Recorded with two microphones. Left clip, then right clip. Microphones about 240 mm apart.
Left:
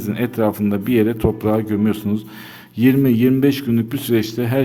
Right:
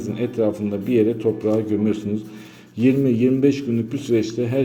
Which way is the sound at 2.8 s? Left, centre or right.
Left.